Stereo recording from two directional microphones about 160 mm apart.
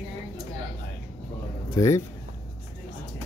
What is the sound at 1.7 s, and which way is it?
Speech, 20° left (ahead or behind).